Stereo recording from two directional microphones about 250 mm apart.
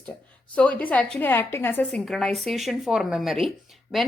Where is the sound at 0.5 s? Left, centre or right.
Centre.